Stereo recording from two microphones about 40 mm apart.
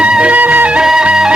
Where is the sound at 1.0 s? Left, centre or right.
Right.